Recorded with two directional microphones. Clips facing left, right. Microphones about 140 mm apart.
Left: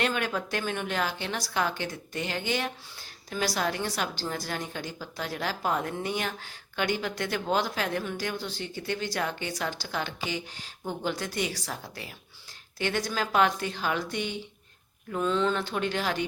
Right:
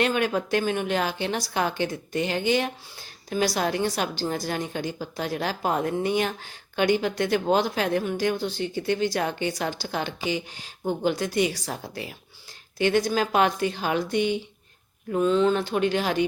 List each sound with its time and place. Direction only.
0.0 s a woman's voice: 20° right (ahead or behind)
12.8 s speech: 15° right (ahead or behind)